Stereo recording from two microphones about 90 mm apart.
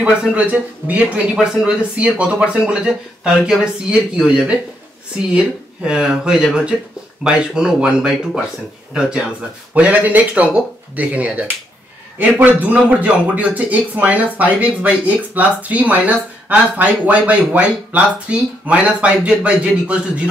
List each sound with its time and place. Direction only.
0.0 s a man's voice: 15° right (ahead or behind)
9.8 s a man's voice: 15° right (ahead or behind)